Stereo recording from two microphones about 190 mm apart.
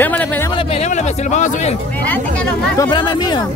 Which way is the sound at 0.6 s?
30° left (ahead or behind).